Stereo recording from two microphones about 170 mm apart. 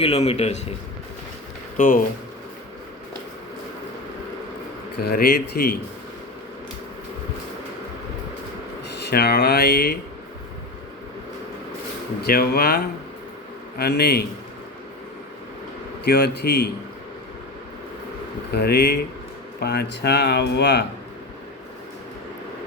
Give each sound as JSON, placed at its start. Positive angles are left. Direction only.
{"t": 0.0, "sound": "a man's voice", "side_deg": 35}
{"t": 5.0, "sound": "speech", "side_deg": 70}
{"t": 9.0, "sound": "speech", "side_deg": 70}
{"t": 12.2, "sound": "speech", "side_deg": 65}
{"t": 16.0, "sound": "speech", "side_deg": 70}
{"t": 18.5, "sound": "speech", "side_deg": 70}